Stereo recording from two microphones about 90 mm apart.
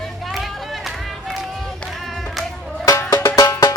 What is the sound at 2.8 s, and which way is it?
Music, 30° left (ahead or behind).